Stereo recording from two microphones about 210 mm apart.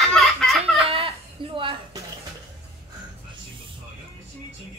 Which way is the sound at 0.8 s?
25° right (ahead or behind).